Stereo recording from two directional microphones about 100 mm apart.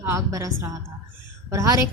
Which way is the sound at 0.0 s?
30° right (ahead or behind).